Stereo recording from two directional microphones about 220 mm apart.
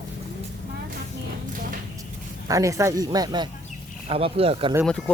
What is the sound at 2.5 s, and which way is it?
Speech, 15° right (ahead or behind).